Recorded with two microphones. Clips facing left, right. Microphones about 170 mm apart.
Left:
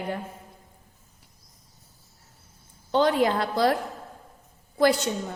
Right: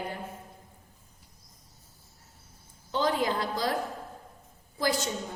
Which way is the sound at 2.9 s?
65° left (ahead or behind).